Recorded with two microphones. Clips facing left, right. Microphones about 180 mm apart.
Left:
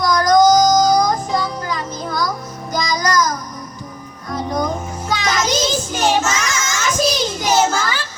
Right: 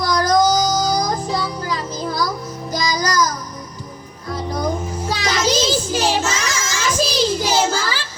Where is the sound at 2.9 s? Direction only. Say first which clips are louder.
Left 2 dB; 30° right (ahead or behind).